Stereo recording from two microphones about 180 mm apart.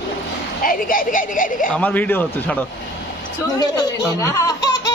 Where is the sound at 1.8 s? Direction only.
10° left (ahead or behind).